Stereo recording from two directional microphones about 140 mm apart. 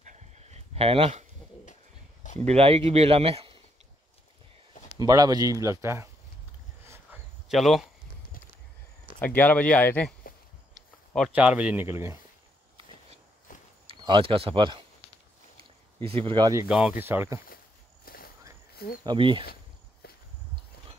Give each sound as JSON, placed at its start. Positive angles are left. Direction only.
{"t": 0.0, "sound": "a sound", "side_deg": -60}
{"t": 2.3, "sound": "speech", "side_deg": -45}
{"t": 4.9, "sound": "speech", "side_deg": -25}
{"t": 7.4, "sound": "speech", "side_deg": 0}
{"t": 9.2, "sound": "speech", "side_deg": 10}
{"t": 10.3, "sound": "a sound", "side_deg": 90}
{"t": 11.3, "sound": "speech", "side_deg": -10}
{"t": 13.5, "sound": "a sound", "side_deg": 70}
{"t": 13.8, "sound": "speech", "side_deg": -40}
{"t": 16.3, "sound": "speech", "side_deg": -30}
{"t": 16.6, "sound": "speech", "side_deg": -5}
{"t": 17.0, "sound": "speech", "side_deg": -15}
{"t": 18.0, "sound": "walk", "side_deg": 90}
{"t": 19.0, "sound": "speech", "side_deg": -35}